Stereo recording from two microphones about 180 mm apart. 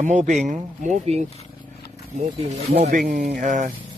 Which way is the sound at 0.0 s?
40° right (ahead or behind).